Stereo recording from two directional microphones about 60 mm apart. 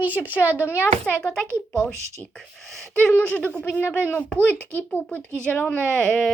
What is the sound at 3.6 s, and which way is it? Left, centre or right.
Speech, left.